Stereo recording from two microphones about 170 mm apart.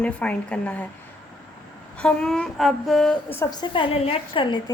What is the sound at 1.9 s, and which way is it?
A woman's voice, 5° left (ahead or behind).